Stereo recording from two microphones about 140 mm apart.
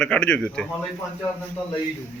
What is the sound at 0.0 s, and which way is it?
Speech, 5° left (ahead or behind).